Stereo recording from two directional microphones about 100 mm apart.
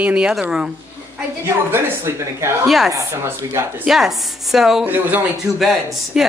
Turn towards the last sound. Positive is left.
turn(degrees=-5)  # may be behind; listen again after turning